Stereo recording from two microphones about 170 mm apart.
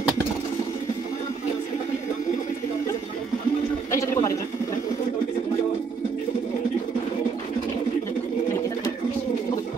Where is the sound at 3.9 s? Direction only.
20° left (ahead or behind).